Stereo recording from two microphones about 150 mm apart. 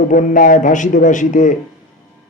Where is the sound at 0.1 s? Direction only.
60° left (ahead or behind).